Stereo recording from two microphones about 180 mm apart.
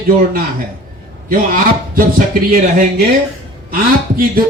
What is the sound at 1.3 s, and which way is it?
Speech, 50° right (ahead or behind).